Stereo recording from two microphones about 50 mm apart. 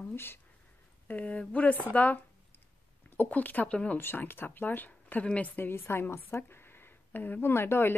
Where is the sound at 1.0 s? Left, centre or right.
Left.